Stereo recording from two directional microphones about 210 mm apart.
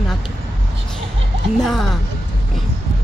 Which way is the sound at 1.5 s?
Centre (ahead or behind).